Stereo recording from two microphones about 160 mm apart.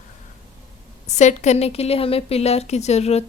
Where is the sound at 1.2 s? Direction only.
45° left (ahead or behind).